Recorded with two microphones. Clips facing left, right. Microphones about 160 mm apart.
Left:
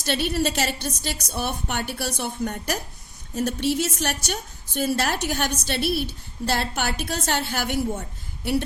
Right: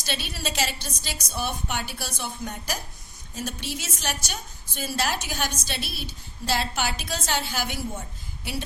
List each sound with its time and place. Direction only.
0.0 s a woman's voice: 55° left (ahead or behind)